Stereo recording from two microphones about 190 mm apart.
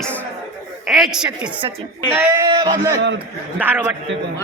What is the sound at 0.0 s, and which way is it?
Chuckle, 5° left (ahead or behind).